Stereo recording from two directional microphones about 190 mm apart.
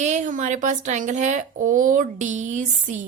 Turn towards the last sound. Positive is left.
turn(degrees=-40)  # may be behind; listen again after turning